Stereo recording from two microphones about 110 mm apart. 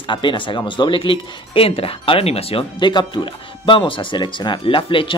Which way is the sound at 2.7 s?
45° left (ahead or behind).